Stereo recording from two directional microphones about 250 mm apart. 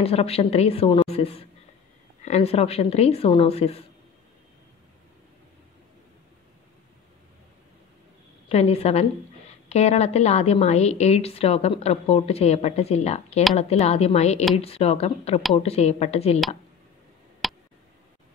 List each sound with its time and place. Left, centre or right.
0.0 s a woman's voice: left
8.5 s a woman's voice: left
17.4 s a sound: centre